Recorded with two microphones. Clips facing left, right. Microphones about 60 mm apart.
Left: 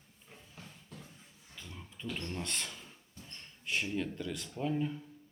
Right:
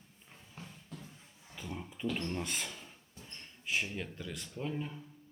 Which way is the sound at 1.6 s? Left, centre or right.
Right.